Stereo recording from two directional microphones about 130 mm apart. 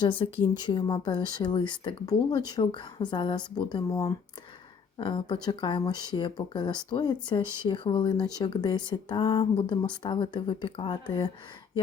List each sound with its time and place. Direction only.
0.0 s speech: 40° left (ahead or behind)